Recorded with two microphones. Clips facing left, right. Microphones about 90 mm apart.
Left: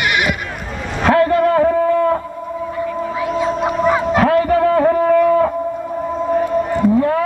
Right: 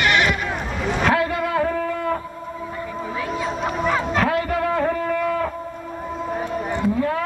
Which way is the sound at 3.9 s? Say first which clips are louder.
Left 7 dB; 15° left (ahead or behind).